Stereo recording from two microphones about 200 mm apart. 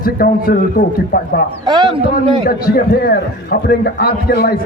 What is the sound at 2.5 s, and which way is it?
A man's voice, 50° left (ahead or behind).